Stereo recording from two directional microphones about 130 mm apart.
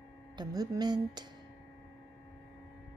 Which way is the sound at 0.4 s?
30° right (ahead or behind).